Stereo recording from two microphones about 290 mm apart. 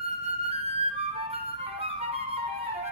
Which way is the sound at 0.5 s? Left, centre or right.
Centre.